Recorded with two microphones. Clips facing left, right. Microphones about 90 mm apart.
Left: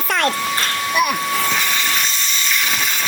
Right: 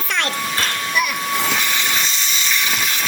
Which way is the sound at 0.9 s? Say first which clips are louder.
Left 4 dB; 45° left (ahead or behind).